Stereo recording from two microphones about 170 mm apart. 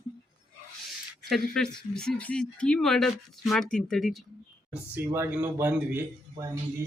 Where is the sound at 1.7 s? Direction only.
5° left (ahead or behind).